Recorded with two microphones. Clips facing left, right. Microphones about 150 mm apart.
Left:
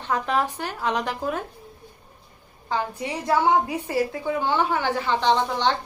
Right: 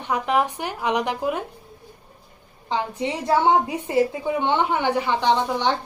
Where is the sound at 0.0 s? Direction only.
15° right (ahead or behind).